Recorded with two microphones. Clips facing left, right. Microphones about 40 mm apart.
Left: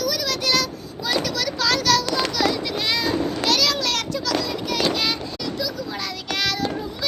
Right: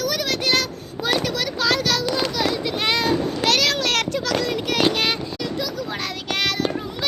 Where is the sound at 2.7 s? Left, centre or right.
Right.